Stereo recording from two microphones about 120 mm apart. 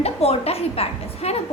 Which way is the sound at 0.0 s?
55° left (ahead or behind).